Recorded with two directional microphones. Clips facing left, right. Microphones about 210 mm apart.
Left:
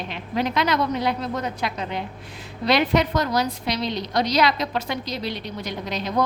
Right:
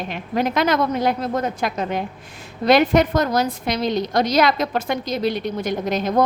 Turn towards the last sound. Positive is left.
turn(degrees=-50)  # may be behind; listen again after turning